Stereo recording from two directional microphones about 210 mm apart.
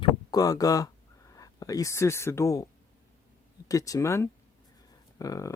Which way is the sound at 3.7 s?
15° left (ahead or behind).